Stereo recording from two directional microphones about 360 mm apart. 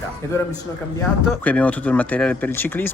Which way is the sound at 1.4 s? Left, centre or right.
Centre.